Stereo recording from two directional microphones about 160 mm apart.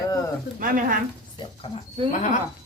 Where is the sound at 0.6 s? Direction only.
60° right (ahead or behind).